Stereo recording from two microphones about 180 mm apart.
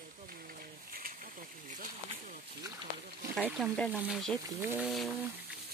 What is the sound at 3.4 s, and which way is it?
Speech, 5° right (ahead or behind).